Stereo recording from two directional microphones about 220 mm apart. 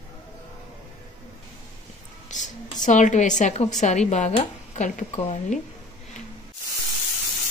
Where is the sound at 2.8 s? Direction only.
35° left (ahead or behind).